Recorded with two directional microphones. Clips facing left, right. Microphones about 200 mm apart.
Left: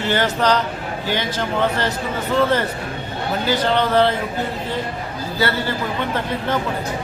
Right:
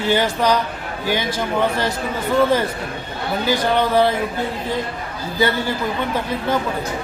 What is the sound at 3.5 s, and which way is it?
Speech, 10° right (ahead or behind).